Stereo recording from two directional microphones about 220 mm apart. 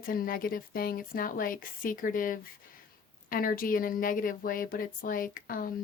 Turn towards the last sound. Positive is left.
turn(degrees=40)  # may be behind; listen again after turning